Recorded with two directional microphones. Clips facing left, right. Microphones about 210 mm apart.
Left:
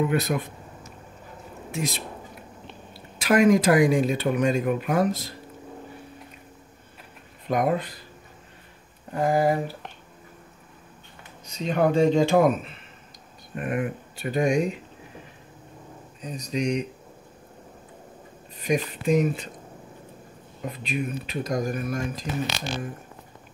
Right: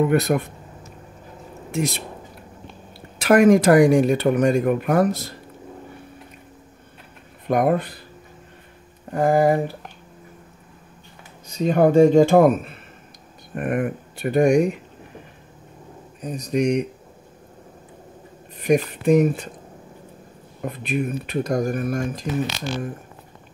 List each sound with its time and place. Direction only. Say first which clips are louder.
0.0 s speech: right 5 dB; 55° right (ahead or behind)
3.2 s speech: right 5 dB; 55° right (ahead or behind)
7.4 s speech: right 4 dB; 55° right (ahead or behind)
9.1 s speech: right 5 dB; 50° right (ahead or behind)
11.6 s speech: right 6 dB; 45° right (ahead or behind)
16.2 s speech: right 6 dB; 55° right (ahead or behind)
18.6 s speech: right 6 dB; 60° right (ahead or behind)
20.6 s speech: right 5 dB; 55° right (ahead or behind)